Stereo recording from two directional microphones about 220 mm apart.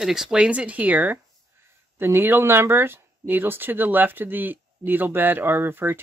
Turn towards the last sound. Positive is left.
turn(degrees=-10)  # may be behind; listen again after turning